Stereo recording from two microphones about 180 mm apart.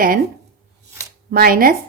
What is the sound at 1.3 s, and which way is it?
Speech, 55° right (ahead or behind).